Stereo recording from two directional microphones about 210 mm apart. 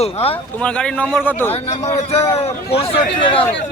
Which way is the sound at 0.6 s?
5° left (ahead or behind).